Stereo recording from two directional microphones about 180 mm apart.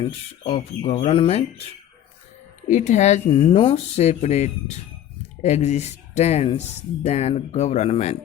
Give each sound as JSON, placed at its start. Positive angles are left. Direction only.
{"t": 0.0, "sound": "speech", "side_deg": 30}